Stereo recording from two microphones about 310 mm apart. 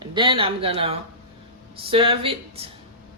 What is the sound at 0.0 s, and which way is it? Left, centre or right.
A woman's voice, centre.